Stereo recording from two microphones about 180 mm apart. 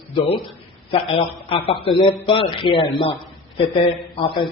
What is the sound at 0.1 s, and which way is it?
A man's voice, 30° left (ahead or behind).